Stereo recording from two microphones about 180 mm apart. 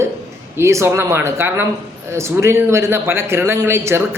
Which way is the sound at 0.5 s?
15° right (ahead or behind).